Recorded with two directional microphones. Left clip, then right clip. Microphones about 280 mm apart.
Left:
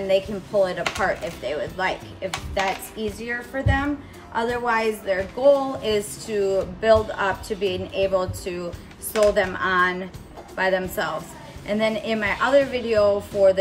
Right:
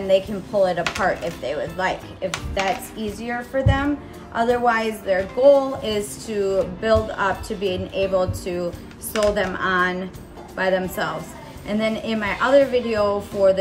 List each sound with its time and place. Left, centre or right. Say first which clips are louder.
0.0 s a woman's voice: right 2 dB; centre